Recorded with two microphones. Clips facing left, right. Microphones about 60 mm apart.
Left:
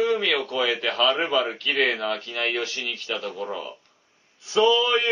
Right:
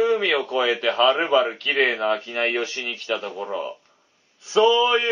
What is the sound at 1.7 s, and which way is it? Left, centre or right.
Plucked string instrument, centre.